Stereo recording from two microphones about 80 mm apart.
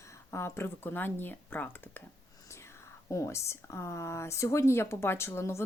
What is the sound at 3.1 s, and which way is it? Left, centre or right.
Speech, left.